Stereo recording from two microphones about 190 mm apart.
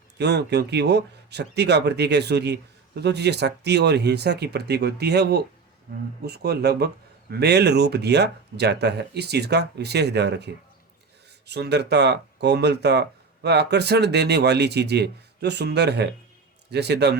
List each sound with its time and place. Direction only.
0.2 s speech: 60° right (ahead or behind)